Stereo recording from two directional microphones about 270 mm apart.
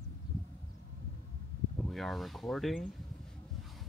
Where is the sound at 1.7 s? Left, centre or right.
Centre.